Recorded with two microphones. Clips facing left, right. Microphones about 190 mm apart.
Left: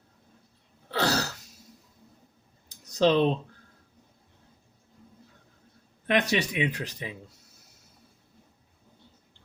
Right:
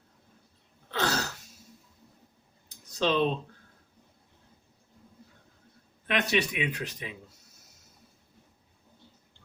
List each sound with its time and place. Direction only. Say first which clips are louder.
0.9 s throat clearing: left 3 dB; 35° left (ahead or behind)
2.6 s a sound: left 5 dB; 35° left (ahead or behind)
6.1 s speech: left 2 dB; 35° left (ahead or behind)